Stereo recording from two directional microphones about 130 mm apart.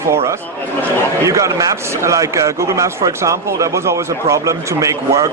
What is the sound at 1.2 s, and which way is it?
A man's voice, 25° right (ahead or behind).